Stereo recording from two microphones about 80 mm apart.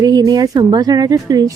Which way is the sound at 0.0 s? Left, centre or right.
Right.